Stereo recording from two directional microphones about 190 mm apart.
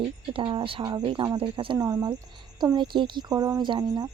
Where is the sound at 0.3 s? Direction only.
25° right (ahead or behind).